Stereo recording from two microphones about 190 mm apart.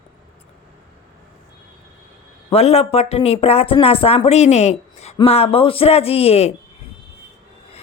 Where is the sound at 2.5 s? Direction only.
35° left (ahead or behind).